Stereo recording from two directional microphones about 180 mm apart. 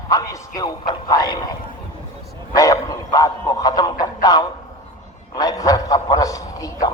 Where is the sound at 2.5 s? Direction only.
20° left (ahead or behind).